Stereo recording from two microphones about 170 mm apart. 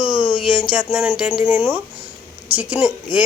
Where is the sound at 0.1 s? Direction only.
5° right (ahead or behind).